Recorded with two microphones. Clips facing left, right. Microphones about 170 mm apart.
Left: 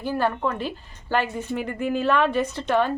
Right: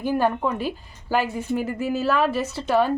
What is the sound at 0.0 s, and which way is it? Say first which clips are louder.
A woman's voice: right 2 dB; 15° right (ahead or behind).